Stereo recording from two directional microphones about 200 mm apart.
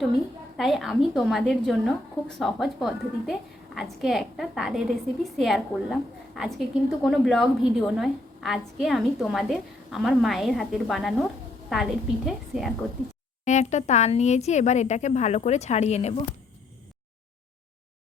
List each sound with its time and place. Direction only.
0.5 s a woman's voice: centre (ahead or behind)
13.4 s speech: 35° left (ahead or behind)